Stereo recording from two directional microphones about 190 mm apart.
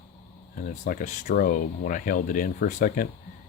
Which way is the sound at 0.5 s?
45° left (ahead or behind).